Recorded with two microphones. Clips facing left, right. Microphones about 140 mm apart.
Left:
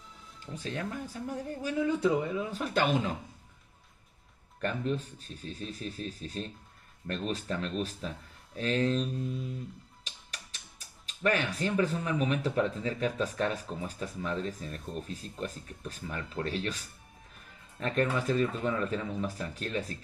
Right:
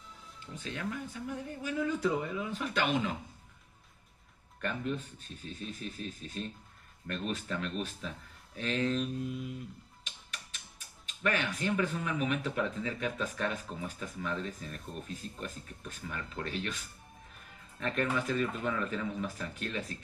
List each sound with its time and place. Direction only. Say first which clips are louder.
0.6 s speech: left 2 dB; 35° left (ahead or behind)
2.5 s speech: left 2 dB; 40° left (ahead or behind)
4.6 s speech: left 3 dB; 35° left (ahead or behind)
10.0 s tick-tock: even; 35° left (ahead or behind)
11.1 s speech: left 3 dB; 35° left (ahead or behind)